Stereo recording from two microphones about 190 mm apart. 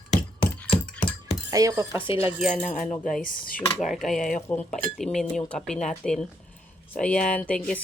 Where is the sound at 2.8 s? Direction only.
45° left (ahead or behind).